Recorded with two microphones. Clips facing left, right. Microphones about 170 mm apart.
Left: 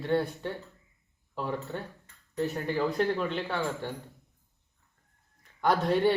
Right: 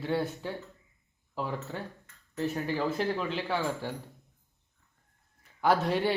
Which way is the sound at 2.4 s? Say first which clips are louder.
Even; 5° right (ahead or behind).